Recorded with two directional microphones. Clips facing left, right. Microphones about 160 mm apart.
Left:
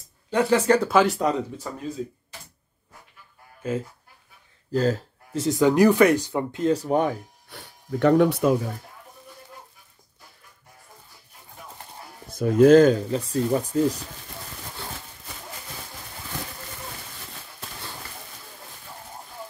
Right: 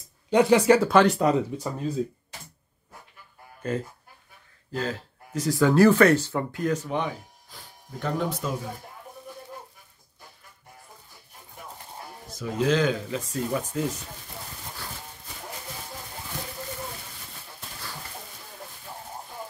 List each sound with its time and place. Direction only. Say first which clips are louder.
0.3 s speech: right 2 dB; 15° right (ahead or behind)
0.7 s speech: right 1 dB; centre (ahead or behind)
1.5 s speech: right 4 dB; 15° right (ahead or behind)
3.6 s speech: left 1 dB; 5° left (ahead or behind)
4.7 s speech: left 8 dB; 40° left (ahead or behind)
5.3 s speech: left 2 dB; 25° left (ahead or behind)
6.8 s speech: left 7 dB; 45° left (ahead or behind)
7.4 s speech: left 6 dB; 65° left (ahead or behind)
12.3 s speech: left 10 dB; 55° left (ahead or behind); by 13.9 s 35° left (ahead or behind)